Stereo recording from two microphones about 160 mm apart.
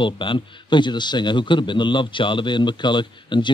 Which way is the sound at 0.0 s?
30° left (ahead or behind).